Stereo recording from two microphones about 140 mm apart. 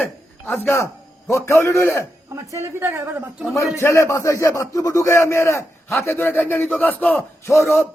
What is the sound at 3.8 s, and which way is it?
A man's voice, 20° left (ahead or behind).